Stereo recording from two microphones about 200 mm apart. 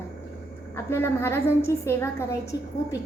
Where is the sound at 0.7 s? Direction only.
15° left (ahead or behind).